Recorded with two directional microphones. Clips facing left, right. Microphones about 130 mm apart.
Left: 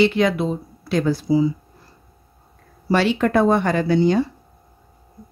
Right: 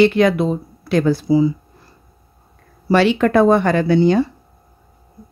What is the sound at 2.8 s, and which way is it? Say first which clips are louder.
Speech: right 4 dB; 75° right (ahead or behind).